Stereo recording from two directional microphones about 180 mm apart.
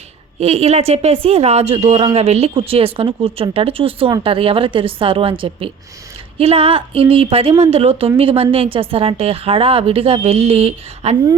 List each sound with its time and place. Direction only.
0.3 s speech: 35° right (ahead or behind)